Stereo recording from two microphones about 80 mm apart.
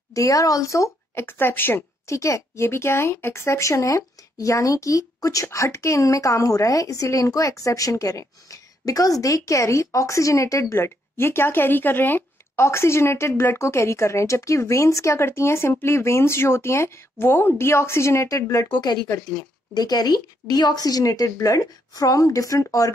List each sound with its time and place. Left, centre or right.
0.1 s speech: left
1.2 s speech: left
2.0 s speech: left
18.7 s a woman's voice: left